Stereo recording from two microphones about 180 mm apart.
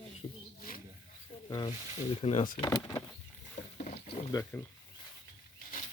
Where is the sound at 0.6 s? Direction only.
55° left (ahead or behind).